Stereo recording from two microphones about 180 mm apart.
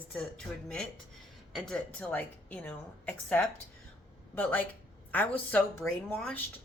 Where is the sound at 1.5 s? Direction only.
5° left (ahead or behind).